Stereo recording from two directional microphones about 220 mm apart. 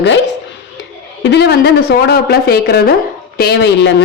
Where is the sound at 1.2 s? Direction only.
50° left (ahead or behind).